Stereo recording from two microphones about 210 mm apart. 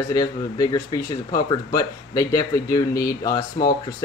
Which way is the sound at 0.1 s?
15° left (ahead or behind).